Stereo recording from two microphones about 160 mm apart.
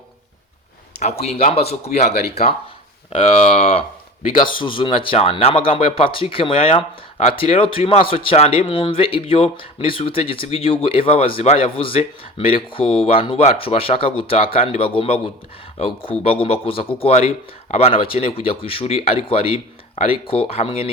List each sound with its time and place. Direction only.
1.2 s a man's voice: 45° left (ahead or behind)